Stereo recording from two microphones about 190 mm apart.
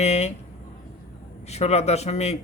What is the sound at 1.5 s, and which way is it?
Speech, 35° left (ahead or behind).